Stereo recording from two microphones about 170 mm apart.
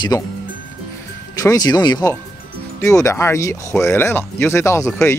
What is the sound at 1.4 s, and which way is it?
Speech, 20° left (ahead or behind).